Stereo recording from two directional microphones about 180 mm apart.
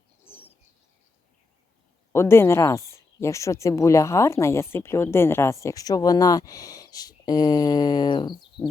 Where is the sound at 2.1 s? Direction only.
15° left (ahead or behind).